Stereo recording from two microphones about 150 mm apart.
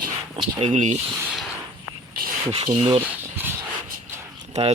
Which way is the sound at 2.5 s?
40° right (ahead or behind).